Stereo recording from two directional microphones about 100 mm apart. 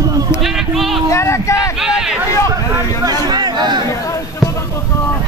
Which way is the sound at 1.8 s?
5° right (ahead or behind).